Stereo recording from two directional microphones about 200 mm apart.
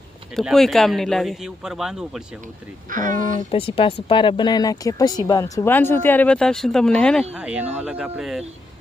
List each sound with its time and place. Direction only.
0.3 s speech: centre (ahead or behind)
2.9 s speech: 40° right (ahead or behind)
3.5 s speech: 25° left (ahead or behind); by 8.4 s centre (ahead or behind)